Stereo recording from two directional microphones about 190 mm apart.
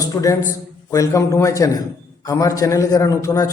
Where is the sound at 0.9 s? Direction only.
15° left (ahead or behind).